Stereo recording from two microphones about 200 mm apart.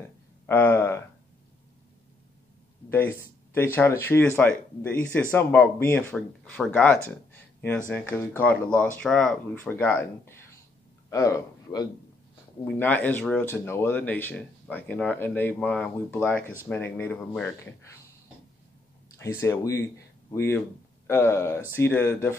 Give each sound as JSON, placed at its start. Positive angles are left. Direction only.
{"t": 0.5, "sound": "speech", "side_deg": 10}
{"t": 2.9, "sound": "a man's voice", "side_deg": 10}
{"t": 19.1, "sound": "speech", "side_deg": 15}